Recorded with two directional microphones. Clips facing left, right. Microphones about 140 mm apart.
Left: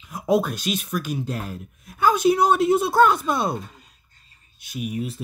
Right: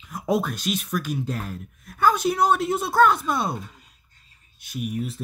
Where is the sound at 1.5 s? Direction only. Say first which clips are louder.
Left 1 dB; 5° left (ahead or behind).